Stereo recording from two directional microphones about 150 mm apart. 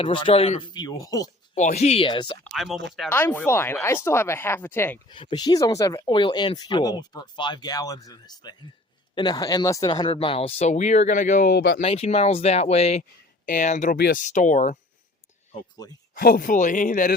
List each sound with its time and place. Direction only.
0.0 s speech: 35° left (ahead or behind)
0.7 s speech: 25° left (ahead or behind)
1.5 s speech: 50° left (ahead or behind); by 2.4 s 35° left (ahead or behind)
2.4 s speech: centre (ahead or behind)
3.1 s speech: 15° left (ahead or behind)
5.0 s speech: 30° left (ahead or behind)
10.1 s speech: 40° left (ahead or behind); by 11.8 s 80° left
11.8 s speech: 45° left (ahead or behind)
13.4 s speech: 60° left (ahead or behind)
13.9 s speech: 80° left; by 14.8 s 55° left (ahead or behind)
15.7 s speech: 25° left (ahead or behind)
16.1 s speech: 80° left; by 17.2 s 65° left (ahead or behind)